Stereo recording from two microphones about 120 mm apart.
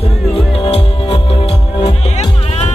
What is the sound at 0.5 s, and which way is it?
Music, 50° left (ahead or behind).